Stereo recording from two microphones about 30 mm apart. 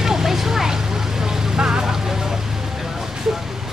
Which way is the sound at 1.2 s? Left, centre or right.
Right.